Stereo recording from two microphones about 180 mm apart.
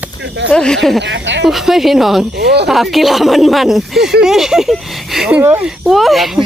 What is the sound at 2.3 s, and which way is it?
Speech, 65° right (ahead or behind).